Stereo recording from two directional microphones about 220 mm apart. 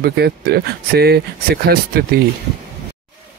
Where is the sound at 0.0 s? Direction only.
45° right (ahead or behind).